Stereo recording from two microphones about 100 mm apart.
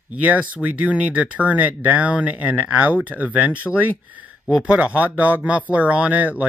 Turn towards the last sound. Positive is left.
turn(degrees=-15)  # may be behind; listen again after turning